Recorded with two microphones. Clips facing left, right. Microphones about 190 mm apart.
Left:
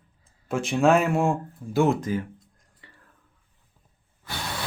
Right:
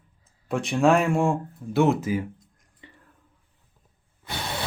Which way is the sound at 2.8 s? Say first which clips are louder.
Right 5 dB; 20° right (ahead or behind).